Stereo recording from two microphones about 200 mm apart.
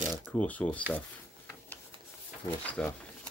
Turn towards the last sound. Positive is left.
turn(degrees=5)  # may be behind; listen again after turning